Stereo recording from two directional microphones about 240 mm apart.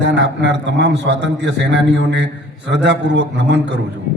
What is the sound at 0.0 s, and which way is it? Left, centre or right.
A man's voice, right.